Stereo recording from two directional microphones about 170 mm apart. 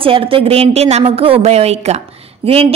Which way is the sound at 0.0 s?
30° right (ahead or behind).